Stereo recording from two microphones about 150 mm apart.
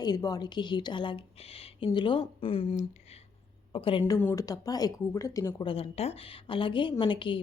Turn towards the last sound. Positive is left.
turn(degrees=35)  # may be behind; listen again after turning